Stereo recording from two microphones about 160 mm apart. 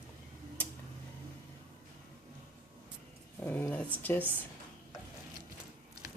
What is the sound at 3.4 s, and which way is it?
Speech, 10° left (ahead or behind).